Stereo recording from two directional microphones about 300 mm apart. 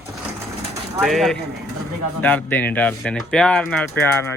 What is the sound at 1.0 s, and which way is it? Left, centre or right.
Speech, centre.